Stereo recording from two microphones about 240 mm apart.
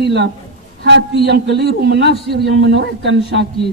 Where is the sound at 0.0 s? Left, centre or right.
Right.